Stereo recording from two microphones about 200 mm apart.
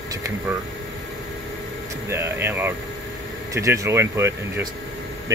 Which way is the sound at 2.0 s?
10° right (ahead or behind).